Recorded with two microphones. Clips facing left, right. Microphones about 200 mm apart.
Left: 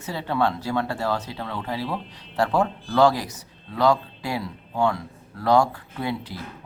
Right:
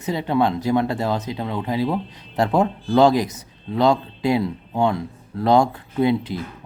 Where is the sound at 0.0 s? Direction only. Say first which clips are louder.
Right 4 dB; 20° right (ahead or behind).